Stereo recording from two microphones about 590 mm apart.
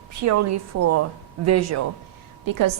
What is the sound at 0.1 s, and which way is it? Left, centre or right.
A woman's voice, right.